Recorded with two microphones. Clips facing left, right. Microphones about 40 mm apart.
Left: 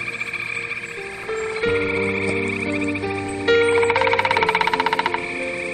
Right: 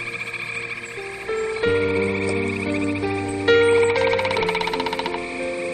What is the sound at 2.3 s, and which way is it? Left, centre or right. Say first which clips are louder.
Music: left 1 dB; centre.